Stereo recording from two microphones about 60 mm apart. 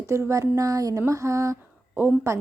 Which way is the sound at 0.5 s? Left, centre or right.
Right.